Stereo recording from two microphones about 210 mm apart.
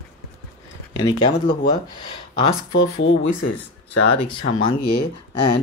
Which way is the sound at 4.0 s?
60° left (ahead or behind).